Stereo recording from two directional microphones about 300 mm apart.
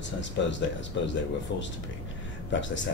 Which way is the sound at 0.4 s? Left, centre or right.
Left.